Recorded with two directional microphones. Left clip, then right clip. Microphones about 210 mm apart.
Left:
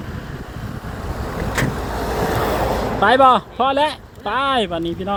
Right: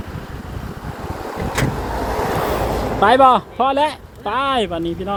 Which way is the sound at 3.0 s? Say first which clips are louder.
Right 1 dB; 10° right (ahead or behind).